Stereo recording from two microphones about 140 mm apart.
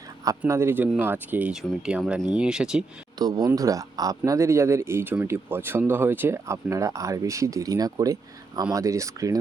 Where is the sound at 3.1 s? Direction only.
25° right (ahead or behind).